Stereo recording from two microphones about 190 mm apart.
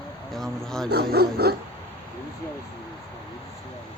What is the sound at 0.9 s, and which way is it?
Speech, 55° right (ahead or behind).